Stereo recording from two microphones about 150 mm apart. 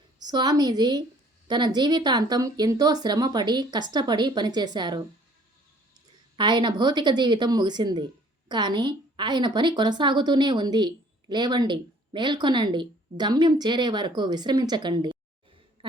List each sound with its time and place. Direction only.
0.2 s a woman's voice: 25° right (ahead or behind)
6.3 s a woman's voice: 30° right (ahead or behind)